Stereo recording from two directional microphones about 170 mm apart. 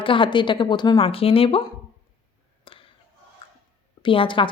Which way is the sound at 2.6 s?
30° left (ahead or behind).